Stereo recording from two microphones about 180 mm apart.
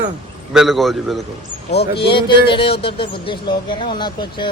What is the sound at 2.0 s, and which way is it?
Speech, 30° left (ahead or behind).